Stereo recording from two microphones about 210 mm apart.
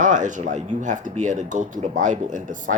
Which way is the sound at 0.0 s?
35° right (ahead or behind).